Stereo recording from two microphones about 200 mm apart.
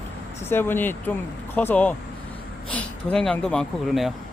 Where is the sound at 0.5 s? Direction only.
10° left (ahead or behind).